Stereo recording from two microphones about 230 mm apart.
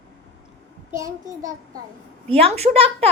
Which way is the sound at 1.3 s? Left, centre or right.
Right.